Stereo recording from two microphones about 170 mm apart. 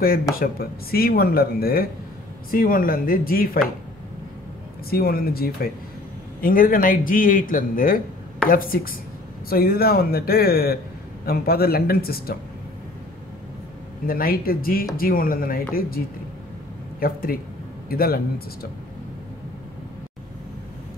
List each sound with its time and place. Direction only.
0.4 s a man's voice: 60° left (ahead or behind)
4.8 s a man's voice: 65° left (ahead or behind)
14.0 s a man's voice: 60° left (ahead or behind)
17.0 s a man's voice: 60° left (ahead or behind)